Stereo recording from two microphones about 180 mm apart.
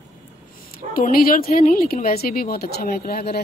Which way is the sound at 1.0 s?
55° left (ahead or behind).